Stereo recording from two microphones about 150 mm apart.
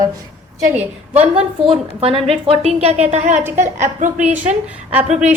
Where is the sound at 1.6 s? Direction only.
40° right (ahead or behind).